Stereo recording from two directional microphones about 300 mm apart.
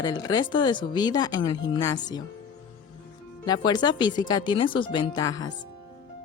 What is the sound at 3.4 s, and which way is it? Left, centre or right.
Speech, centre.